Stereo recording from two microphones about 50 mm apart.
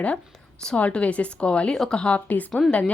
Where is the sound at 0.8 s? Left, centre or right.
Left.